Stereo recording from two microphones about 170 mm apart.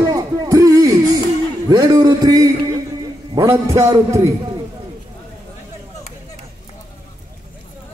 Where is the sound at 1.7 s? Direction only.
25° right (ahead or behind).